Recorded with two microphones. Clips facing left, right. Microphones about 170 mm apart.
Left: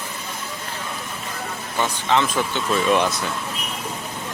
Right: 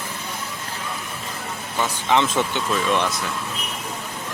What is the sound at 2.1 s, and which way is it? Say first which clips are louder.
Speech: right 1 dB; 20° right (ahead or behind).